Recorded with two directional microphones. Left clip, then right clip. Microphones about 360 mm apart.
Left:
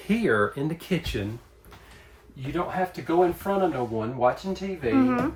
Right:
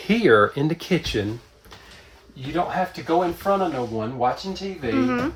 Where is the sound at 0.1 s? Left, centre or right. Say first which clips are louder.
Right 7 dB; centre.